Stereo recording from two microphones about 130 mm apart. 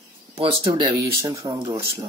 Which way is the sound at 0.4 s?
45° right (ahead or behind).